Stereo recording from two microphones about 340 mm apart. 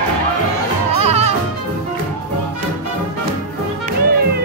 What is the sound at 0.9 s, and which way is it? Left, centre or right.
Music, centre.